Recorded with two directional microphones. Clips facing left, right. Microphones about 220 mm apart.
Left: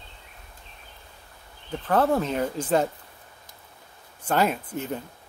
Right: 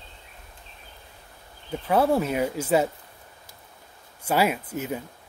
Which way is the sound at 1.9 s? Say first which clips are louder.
Right 1 dB; 10° right (ahead or behind).